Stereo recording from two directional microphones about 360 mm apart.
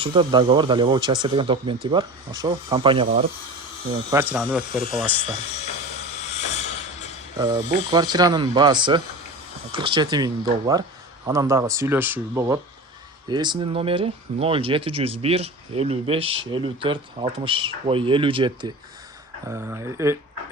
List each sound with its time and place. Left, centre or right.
0.0 s speech: centre
6.4 s music: centre
7.3 s speech: centre